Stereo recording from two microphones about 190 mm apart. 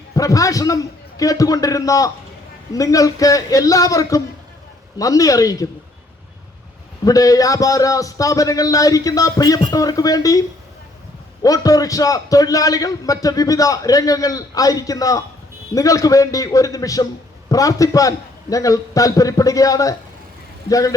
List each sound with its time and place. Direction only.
0.2 s a man's voice: 15° left (ahead or behind)
7.0 s a man's voice: 20° left (ahead or behind)
11.4 s a man's voice: 20° left (ahead or behind)